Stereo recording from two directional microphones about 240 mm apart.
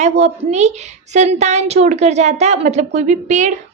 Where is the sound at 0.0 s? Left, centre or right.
Right.